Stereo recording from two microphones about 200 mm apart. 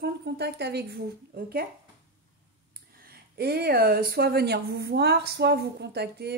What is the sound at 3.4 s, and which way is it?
Speech, 50° right (ahead or behind).